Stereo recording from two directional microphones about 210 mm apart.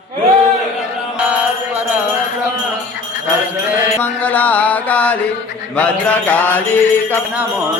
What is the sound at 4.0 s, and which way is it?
Mantra, 10° left (ahead or behind).